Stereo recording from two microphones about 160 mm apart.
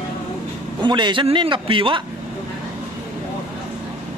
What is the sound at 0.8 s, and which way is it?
A man's voice, 30° right (ahead or behind).